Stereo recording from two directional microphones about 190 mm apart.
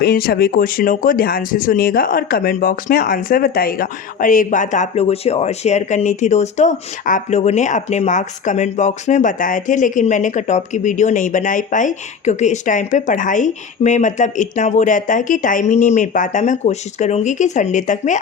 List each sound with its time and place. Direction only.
0.0 s speech: 50° left (ahead or behind)